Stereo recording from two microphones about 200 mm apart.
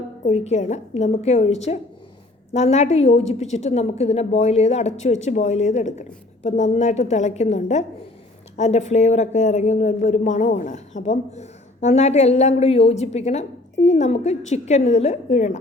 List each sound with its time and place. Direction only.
0.3 s speech: 35° left (ahead or behind)